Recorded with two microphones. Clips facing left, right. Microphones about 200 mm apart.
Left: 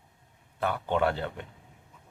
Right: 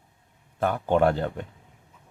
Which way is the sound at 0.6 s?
45° right (ahead or behind).